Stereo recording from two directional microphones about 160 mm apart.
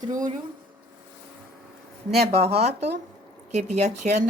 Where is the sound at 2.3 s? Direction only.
40° right (ahead or behind).